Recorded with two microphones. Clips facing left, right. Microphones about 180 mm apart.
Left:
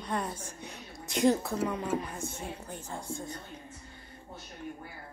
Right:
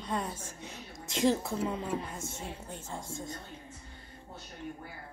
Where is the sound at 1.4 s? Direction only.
25° right (ahead or behind).